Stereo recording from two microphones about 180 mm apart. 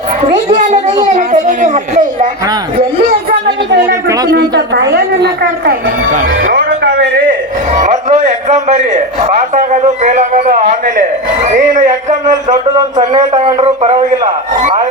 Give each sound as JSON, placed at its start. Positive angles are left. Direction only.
{"t": 0.5, "sound": "a man's voice", "side_deg": -45}
{"t": 4.3, "sound": "a woman's voice", "side_deg": -65}
{"t": 6.1, "sound": "speech", "side_deg": -50}
{"t": 7.7, "sound": "a man's voice", "side_deg": -40}
{"t": 11.9, "sound": "a man's voice", "side_deg": -20}